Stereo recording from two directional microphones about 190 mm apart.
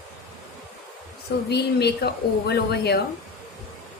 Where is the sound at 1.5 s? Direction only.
60° left (ahead or behind).